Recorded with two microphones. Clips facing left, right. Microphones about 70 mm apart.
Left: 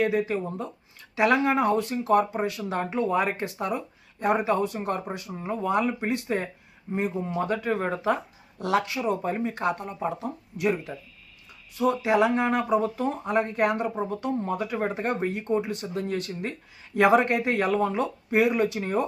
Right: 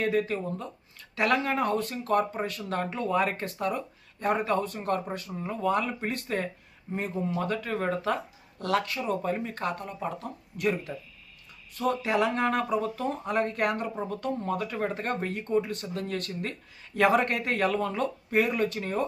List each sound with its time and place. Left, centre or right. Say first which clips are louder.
0.0 s speech: left 2 dB; centre